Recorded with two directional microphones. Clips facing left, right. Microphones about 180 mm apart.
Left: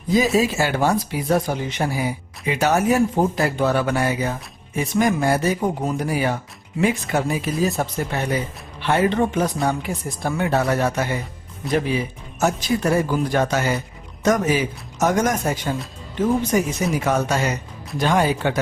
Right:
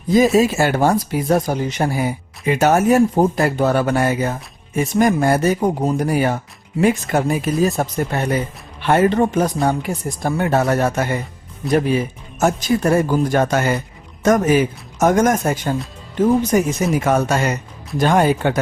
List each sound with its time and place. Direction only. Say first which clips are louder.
0.3 s speech: right 4 dB; 50° right (ahead or behind)